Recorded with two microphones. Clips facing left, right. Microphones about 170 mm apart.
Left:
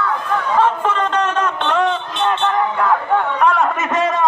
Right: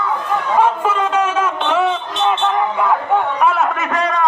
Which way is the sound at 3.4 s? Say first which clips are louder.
Even; 5° right (ahead or behind).